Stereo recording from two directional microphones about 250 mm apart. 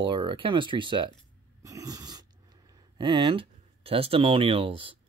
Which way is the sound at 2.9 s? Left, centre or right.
Centre.